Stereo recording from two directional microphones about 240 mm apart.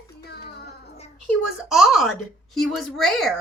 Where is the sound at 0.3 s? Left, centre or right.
Left.